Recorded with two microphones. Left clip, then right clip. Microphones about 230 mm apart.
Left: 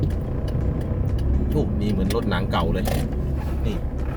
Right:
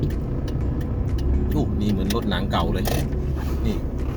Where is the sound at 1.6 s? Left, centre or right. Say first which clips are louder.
Left 1 dB; centre.